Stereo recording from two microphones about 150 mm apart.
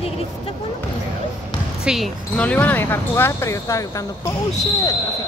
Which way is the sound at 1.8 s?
5° right (ahead or behind).